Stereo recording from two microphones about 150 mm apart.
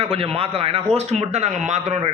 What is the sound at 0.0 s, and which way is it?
A man's voice, 40° right (ahead or behind).